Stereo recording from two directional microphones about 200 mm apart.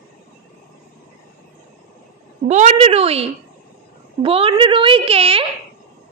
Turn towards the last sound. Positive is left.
turn(degrees=-30)  # may be behind; listen again after turning